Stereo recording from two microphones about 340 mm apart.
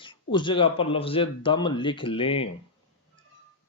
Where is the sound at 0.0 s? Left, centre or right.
Centre.